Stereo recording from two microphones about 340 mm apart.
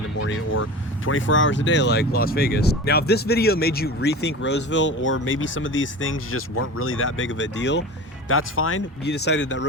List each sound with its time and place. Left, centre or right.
0.2 s speech: left